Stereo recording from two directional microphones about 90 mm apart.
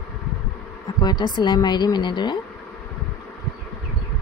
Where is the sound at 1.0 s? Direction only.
55° left (ahead or behind).